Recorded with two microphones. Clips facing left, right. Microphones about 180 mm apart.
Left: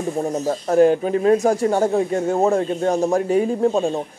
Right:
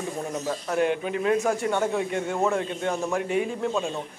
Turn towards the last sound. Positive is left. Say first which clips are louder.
# left 8 dB
turn(degrees=40)  # may be behind; listen again after turning